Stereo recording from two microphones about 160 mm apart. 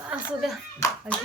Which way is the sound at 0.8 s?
20° left (ahead or behind).